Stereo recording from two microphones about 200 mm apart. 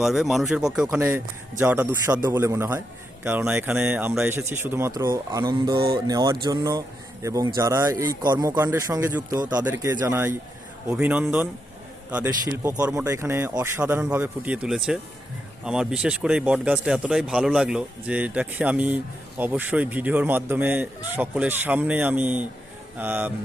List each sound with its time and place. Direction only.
0.0 s speech: centre (ahead or behind)